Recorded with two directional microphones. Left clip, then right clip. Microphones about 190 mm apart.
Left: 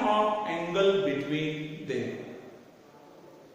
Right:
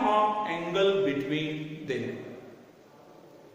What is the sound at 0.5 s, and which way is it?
Music, 25° right (ahead or behind).